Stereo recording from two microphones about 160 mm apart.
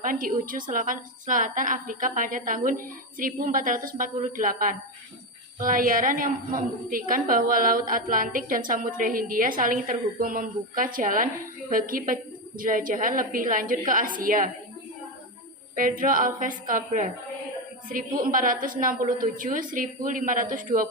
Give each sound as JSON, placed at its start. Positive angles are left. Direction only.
{"t": 0.0, "sound": "a woman's voice", "side_deg": -60}
{"t": 15.7, "sound": "a woman's voice", "side_deg": -60}